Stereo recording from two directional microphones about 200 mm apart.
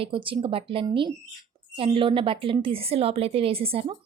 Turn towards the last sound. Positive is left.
turn(degrees=-30)  # may be behind; listen again after turning